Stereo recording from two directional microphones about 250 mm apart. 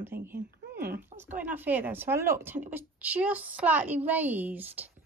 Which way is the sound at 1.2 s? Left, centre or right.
Centre.